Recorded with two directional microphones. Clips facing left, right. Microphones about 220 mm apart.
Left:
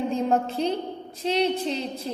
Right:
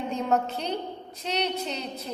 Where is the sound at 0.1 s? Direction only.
30° left (ahead or behind).